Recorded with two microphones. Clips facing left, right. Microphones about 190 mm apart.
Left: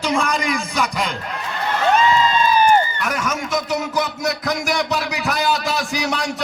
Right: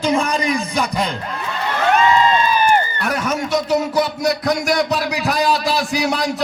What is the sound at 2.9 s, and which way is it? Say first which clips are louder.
Speech: right 3 dB; 35° right (ahead or behind).